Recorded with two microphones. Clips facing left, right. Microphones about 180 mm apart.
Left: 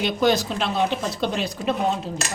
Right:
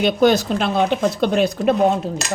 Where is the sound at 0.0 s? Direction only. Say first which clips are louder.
Right 5 dB; 50° right (ahead or behind).